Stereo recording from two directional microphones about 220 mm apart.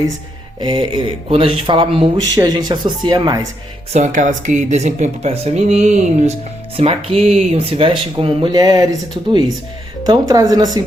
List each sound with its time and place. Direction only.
0.6 s speech: 20° right (ahead or behind)
3.9 s speech: 35° right (ahead or behind); by 10.7 s 15° right (ahead or behind)